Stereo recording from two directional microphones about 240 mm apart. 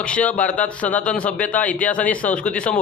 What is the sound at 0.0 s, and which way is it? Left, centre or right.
A man's voice, centre.